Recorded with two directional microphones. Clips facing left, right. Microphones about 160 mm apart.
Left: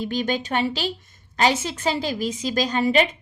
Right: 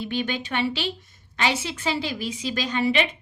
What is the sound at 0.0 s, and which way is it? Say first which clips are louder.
A woman's voice: left 3 dB; 40° left (ahead or behind).